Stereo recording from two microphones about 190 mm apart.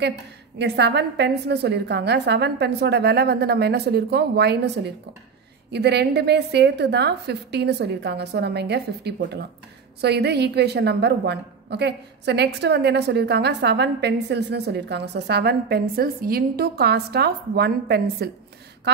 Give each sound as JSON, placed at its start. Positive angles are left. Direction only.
{"t": 0.6, "sound": "a woman's voice", "side_deg": -65}